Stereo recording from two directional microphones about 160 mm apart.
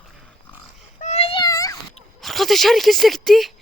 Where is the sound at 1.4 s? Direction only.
20° left (ahead or behind).